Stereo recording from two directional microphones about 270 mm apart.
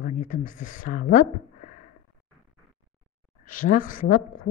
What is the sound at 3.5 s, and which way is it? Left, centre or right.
Speech, left.